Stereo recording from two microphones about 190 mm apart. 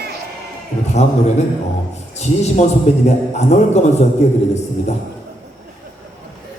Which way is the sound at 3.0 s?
35° left (ahead or behind).